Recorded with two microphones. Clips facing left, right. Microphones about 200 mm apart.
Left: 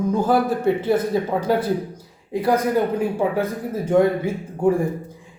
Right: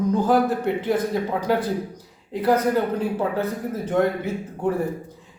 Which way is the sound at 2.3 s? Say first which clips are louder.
Left 1 dB; 10° left (ahead or behind).